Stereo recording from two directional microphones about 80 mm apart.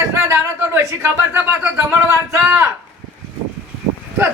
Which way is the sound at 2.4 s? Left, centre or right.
Centre.